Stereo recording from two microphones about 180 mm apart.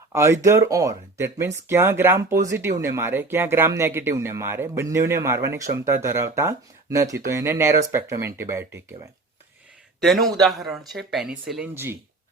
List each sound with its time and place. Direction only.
0.1 s speech: 15° right (ahead or behind)
10.0 s speech: centre (ahead or behind)
11.7 s speech: 15° right (ahead or behind)